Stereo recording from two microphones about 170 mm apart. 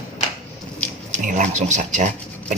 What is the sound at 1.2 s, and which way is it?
Speech, 50° right (ahead or behind).